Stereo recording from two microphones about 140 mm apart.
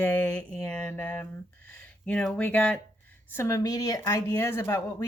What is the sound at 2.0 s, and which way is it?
Speech, 5° left (ahead or behind).